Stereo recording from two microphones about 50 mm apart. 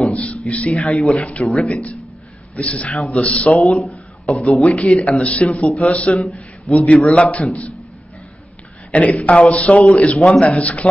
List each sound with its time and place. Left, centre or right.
0.1 s speech: left
0.9 s a man's voice: centre
1.2 s a man's voice: left
1.5 s speech: centre
2.5 s a man's voice: left
8.9 s a man's voice: left
10.1 s a man's voice: centre
10.4 s a man's voice: left